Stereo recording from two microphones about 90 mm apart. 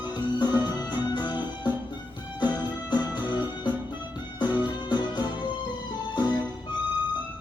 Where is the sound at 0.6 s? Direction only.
55° left (ahead or behind).